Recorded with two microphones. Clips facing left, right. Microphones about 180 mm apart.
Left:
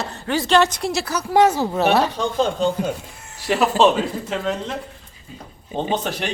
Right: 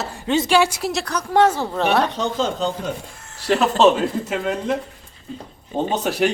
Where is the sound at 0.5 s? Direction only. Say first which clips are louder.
Left 4 dB; 10° right (ahead or behind).